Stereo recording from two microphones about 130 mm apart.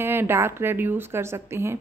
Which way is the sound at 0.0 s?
15° right (ahead or behind).